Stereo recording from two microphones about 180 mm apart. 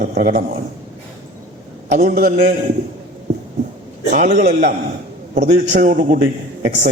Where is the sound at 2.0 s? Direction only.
45° right (ahead or behind).